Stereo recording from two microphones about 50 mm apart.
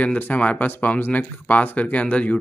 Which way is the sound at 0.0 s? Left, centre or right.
Left.